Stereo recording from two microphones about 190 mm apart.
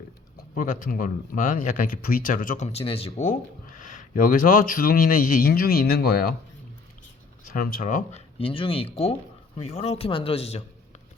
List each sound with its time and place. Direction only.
0.5 s speech: 45° left (ahead or behind)
7.4 s speech: 50° left (ahead or behind)
8.4 s speech: 30° left (ahead or behind)